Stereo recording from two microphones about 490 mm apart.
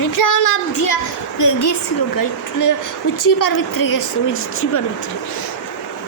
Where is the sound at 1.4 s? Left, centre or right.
Left.